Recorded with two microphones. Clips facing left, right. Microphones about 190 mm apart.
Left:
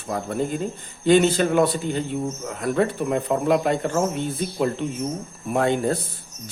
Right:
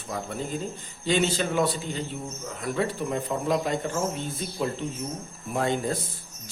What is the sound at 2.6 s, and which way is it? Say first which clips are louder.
A man's voice: left 6 dB; 55° left (ahead or behind).